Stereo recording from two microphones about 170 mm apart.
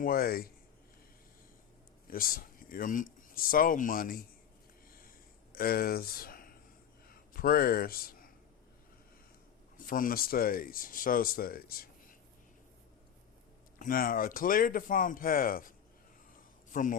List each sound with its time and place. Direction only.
0.0 s speech: 60° left (ahead or behind)
2.0 s speech: 60° left (ahead or behind)
5.5 s speech: 60° left (ahead or behind)
9.7 s speech: 55° left (ahead or behind)
13.7 s speech: 55° left (ahead or behind)
16.3 s a sound: 50° left (ahead or behind)